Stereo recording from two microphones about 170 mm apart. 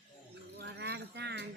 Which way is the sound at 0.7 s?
90° right.